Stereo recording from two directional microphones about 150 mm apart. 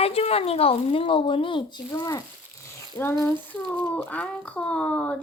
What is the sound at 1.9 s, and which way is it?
Speech, 25° left (ahead or behind).